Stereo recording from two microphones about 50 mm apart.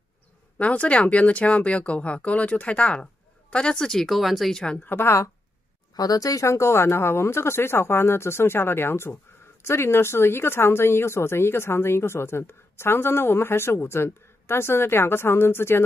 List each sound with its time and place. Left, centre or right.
0.6 s speech: left; by 4.1 s centre
4.1 s speech: centre
4.8 s a woman's voice: left
6.3 s speech: left